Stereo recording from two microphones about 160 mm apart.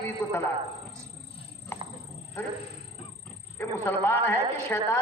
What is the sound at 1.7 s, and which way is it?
Horse, 15° left (ahead or behind).